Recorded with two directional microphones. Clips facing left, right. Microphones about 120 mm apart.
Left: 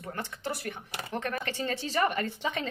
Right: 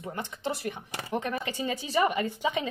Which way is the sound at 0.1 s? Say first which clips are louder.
Right 2 dB; 20° right (ahead or behind).